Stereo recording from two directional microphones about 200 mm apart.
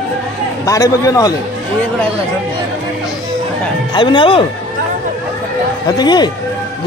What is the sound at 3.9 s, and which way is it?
Speech, 25° left (ahead or behind).